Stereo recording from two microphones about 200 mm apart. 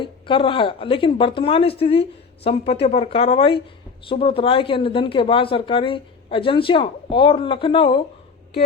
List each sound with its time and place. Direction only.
0.0 s speech: 25° left (ahead or behind)